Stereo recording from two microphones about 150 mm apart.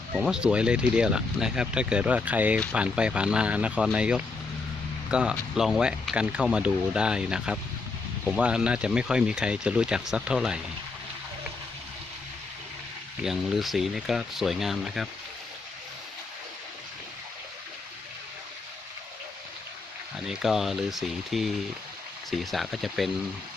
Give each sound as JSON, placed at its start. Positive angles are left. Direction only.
{"t": 0.2, "sound": "speech", "side_deg": -5}
{"t": 13.2, "sound": "speech", "side_deg": 0}
{"t": 20.1, "sound": "speech", "side_deg": -5}